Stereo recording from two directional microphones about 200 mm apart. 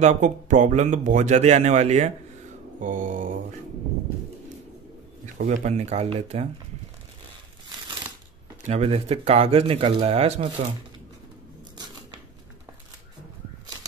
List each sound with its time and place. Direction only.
0.0 s speech: 35° right (ahead or behind)
5.2 s speech: 35° right (ahead or behind)
8.6 s speech: 30° right (ahead or behind)